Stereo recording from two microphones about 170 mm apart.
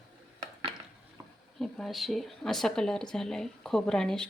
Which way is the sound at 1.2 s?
15° right (ahead or behind).